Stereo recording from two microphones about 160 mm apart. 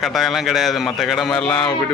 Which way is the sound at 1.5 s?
25° left (ahead or behind).